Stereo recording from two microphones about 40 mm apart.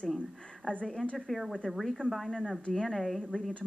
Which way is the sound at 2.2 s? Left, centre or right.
Centre.